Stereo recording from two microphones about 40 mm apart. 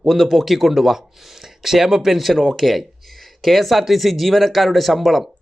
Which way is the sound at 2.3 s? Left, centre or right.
Centre.